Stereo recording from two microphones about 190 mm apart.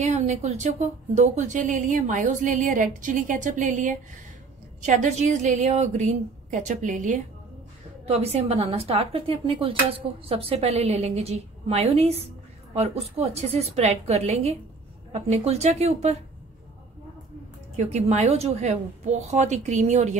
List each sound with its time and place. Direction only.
0.0 s speech: 35° right (ahead or behind)
8.0 s speech: 30° right (ahead or behind)
17.7 s speech: 35° right (ahead or behind)